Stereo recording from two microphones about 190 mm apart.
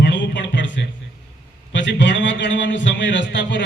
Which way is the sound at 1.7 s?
70° left (ahead or behind).